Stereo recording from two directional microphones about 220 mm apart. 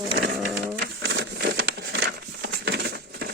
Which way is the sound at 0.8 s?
50° right (ahead or behind).